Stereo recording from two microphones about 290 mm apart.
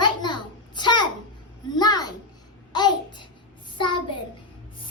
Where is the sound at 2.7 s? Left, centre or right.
Centre.